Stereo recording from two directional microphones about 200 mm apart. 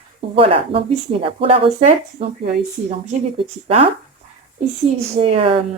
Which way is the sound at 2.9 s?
30° right (ahead or behind).